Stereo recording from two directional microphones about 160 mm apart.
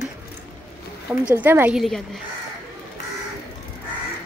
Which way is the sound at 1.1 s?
10° right (ahead or behind).